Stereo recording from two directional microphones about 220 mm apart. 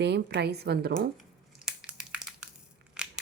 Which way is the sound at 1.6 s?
5° right (ahead or behind).